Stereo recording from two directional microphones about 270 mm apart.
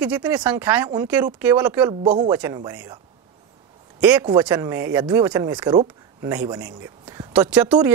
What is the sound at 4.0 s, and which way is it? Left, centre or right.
Speech, centre.